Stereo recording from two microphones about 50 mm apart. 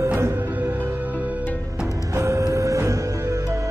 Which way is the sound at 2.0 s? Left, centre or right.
Right.